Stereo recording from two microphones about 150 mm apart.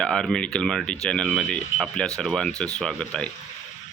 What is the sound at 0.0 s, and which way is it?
Speech, 5° left (ahead or behind).